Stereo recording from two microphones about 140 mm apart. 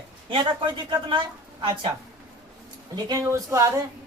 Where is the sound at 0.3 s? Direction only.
35° right (ahead or behind).